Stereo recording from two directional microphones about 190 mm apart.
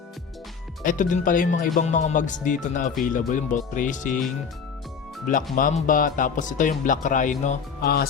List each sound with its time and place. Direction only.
0.8 s speech: 45° left (ahead or behind)
5.5 s speech: 45° left (ahead or behind)